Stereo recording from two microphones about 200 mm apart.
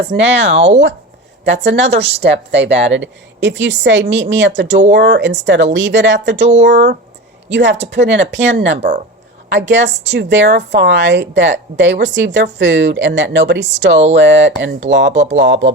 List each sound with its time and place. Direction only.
0.1 s a woman's voice: 60° right (ahead or behind)
2.0 s a woman's voice: 30° right (ahead or behind)
2.3 s a woman's voice: 60° right (ahead or behind)
2.6 s a woman's voice: 30° right (ahead or behind)
2.9 s a woman's voice: 65° right (ahead or behind)